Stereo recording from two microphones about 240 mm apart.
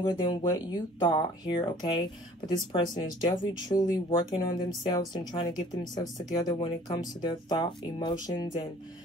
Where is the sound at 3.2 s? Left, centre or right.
Centre.